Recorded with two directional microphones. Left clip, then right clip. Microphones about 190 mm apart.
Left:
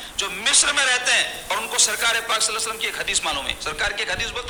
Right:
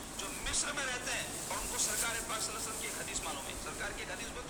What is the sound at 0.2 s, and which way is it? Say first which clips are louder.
A man's voice: left 18 dB; 45° left (ahead or behind).